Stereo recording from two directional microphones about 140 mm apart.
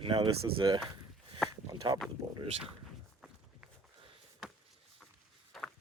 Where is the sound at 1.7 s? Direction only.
30° right (ahead or behind).